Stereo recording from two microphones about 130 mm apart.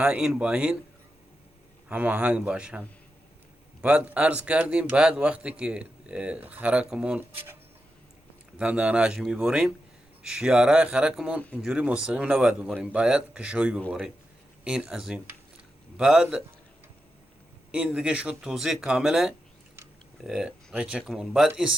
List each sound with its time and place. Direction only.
0.0 s speech: 5° right (ahead or behind)
1.9 s speech: 10° right (ahead or behind)
8.5 s speech: 10° right (ahead or behind)
17.7 s speech: 10° right (ahead or behind)